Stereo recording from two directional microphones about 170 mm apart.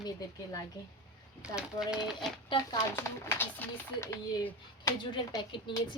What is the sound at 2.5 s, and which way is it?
A woman's voice, 20° left (ahead or behind).